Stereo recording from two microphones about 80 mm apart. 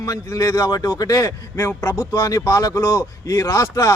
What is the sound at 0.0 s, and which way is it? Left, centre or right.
Speech, left.